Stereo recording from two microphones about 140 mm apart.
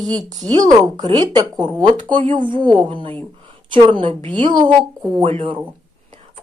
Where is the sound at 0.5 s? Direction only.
30° right (ahead or behind).